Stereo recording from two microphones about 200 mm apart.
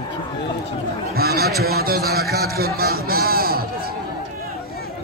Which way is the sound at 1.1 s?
50° right (ahead or behind).